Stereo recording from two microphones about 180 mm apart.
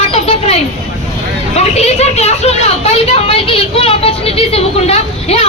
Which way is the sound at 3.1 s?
30° left (ahead or behind).